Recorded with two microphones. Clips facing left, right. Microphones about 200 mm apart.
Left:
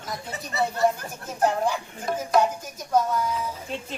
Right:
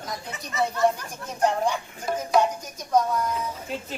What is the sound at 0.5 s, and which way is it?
Speech, 35° left (ahead or behind).